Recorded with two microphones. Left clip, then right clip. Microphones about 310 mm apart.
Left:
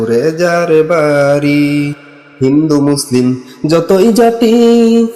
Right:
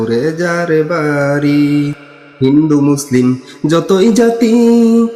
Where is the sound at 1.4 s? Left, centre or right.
Right.